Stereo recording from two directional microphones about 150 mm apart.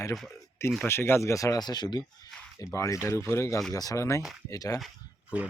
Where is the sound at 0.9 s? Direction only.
15° left (ahead or behind).